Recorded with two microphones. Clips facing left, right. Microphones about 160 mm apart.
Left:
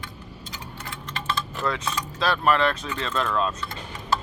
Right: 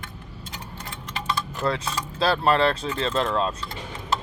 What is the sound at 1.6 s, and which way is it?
Speech, 30° right (ahead or behind).